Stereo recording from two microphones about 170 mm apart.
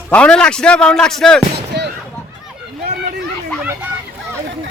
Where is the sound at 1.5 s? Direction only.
80° right.